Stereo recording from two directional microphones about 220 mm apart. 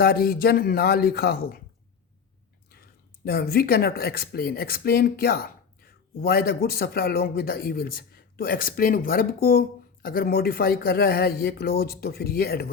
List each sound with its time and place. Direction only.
0.0 s speech: 45° left (ahead or behind)
2.6 s speech: 45° left (ahead or behind)